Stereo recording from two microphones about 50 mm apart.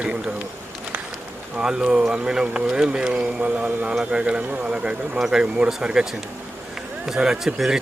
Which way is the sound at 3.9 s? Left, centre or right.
Centre.